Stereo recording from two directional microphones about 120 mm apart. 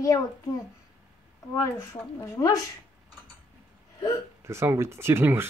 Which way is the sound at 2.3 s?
25° left (ahead or behind).